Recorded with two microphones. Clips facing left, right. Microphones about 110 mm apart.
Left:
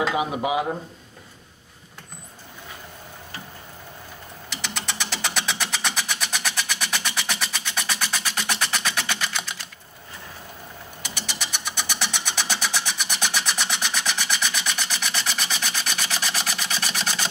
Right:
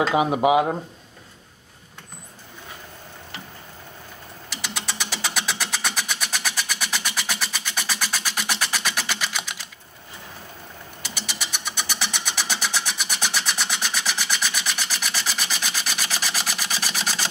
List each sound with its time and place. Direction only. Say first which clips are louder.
0.1 s speech: right 6 dB; 25° right (ahead or behind)
4.7 s vehicle: even; 5° right (ahead or behind)
11.3 s a sound: even; centre (ahead or behind)